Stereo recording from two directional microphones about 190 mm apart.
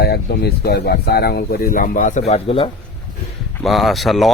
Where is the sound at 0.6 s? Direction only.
55° left (ahead or behind).